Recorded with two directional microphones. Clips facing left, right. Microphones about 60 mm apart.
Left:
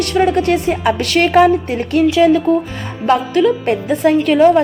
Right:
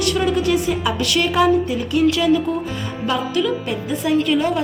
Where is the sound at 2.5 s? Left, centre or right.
Left.